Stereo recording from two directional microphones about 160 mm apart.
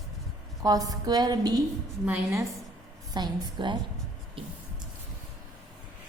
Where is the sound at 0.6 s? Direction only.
20° right (ahead or behind).